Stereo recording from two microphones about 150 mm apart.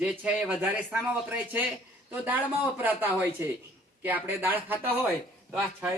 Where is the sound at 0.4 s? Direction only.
5° right (ahead or behind).